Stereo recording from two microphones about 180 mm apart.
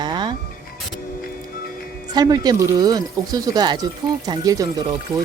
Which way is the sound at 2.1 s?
20° right (ahead or behind).